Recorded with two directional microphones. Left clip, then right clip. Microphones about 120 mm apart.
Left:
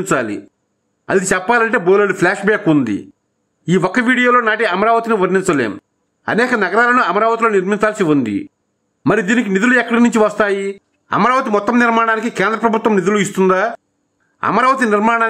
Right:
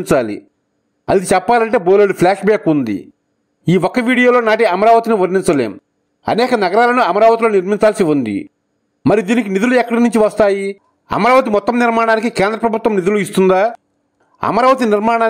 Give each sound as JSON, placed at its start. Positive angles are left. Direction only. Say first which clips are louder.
{"t": 0.1, "sound": "speech", "louder": "right 4 dB", "side_deg": -30}